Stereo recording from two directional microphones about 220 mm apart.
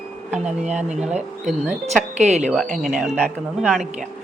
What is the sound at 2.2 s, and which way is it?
Speech, 30° right (ahead or behind).